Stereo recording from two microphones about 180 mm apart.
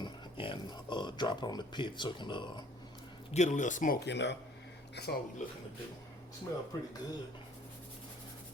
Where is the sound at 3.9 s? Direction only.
75° left (ahead or behind).